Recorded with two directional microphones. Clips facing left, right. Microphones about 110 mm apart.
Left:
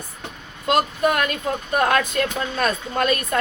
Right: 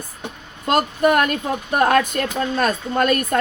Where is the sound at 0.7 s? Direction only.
45° right (ahead or behind).